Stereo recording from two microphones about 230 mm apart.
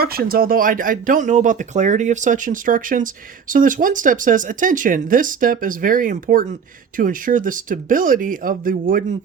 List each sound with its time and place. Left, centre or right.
0.0 s speech: right